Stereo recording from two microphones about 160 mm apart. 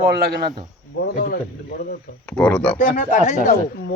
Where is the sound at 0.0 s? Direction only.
75° right (ahead or behind).